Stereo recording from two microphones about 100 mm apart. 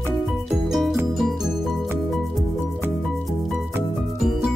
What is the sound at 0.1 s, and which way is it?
Music, 5° left (ahead or behind).